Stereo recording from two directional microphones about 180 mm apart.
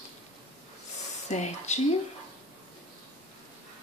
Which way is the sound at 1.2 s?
40° left (ahead or behind).